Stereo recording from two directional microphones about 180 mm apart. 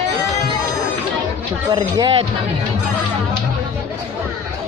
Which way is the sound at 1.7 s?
25° right (ahead or behind).